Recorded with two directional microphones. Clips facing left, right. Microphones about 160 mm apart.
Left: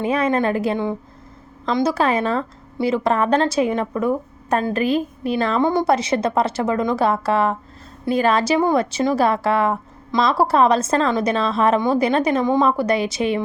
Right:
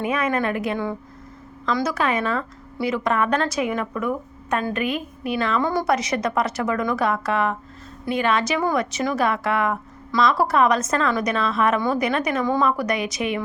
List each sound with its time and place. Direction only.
0.0 s a woman's voice: 30° left (ahead or behind)